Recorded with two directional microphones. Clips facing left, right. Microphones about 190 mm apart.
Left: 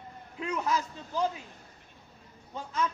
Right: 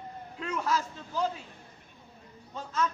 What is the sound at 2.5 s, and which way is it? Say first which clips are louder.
Speech: right 1 dB; 10° left (ahead or behind).